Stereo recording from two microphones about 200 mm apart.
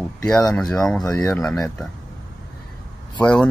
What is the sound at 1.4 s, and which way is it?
Speech, 5° left (ahead or behind).